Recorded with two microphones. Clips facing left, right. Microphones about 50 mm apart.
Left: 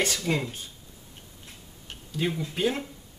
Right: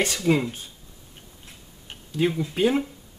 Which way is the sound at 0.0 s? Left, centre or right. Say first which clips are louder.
Right 5 dB; centre.